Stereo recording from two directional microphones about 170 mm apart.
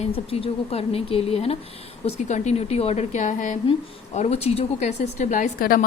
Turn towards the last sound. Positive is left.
turn(degrees=55)  # may be behind; listen again after turning